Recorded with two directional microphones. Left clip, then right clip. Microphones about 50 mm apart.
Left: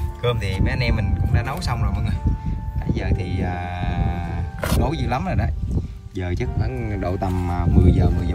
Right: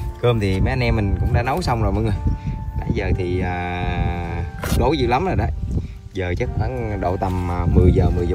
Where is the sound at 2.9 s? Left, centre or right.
Left.